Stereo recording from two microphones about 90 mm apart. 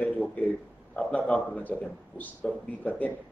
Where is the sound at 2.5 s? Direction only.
10° left (ahead or behind).